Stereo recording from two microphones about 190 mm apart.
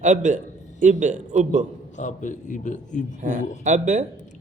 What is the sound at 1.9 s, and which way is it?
A man's voice, 40° left (ahead or behind).